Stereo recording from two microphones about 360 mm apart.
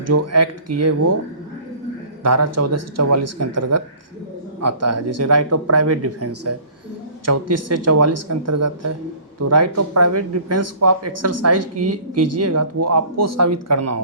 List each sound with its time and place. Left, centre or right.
0.0 s speech: right
2.2 s speech: right